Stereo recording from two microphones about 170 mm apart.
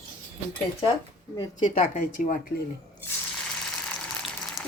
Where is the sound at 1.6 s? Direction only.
50° left (ahead or behind).